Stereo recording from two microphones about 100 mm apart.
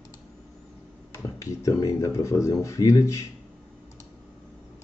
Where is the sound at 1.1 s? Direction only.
30° left (ahead or behind).